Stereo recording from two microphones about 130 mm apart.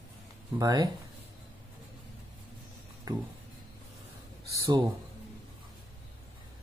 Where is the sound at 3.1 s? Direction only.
30° right (ahead or behind).